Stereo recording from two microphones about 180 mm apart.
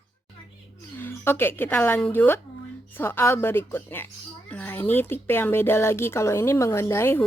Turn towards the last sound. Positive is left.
turn(degrees=15)  # may be behind; listen again after turning